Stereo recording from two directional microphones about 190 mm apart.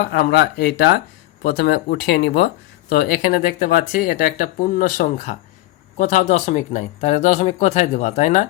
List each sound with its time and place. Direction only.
0.0 s speech: 60° left (ahead or behind); by 8.4 s 40° left (ahead or behind)